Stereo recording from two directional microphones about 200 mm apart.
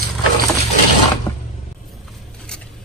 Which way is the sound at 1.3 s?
20° left (ahead or behind).